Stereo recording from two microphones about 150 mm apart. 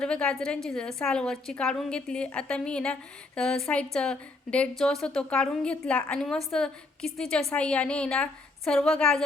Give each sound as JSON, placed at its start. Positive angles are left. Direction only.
{"t": 0.0, "sound": "a woman's voice", "side_deg": 5}